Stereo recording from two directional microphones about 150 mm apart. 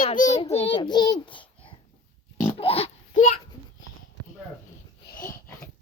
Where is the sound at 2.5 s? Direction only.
40° left (ahead or behind).